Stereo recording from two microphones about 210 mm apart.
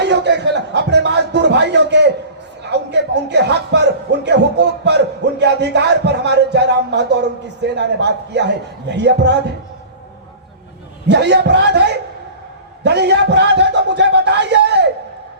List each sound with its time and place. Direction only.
0.0 s music: 55° right (ahead or behind)
2.9 s speech: 55° right (ahead or behind)
11.1 s speech: 55° right (ahead or behind)